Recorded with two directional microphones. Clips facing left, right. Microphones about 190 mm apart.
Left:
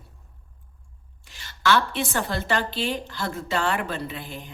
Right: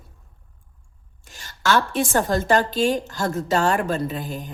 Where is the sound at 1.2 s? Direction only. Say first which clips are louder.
Even; 45° right (ahead or behind).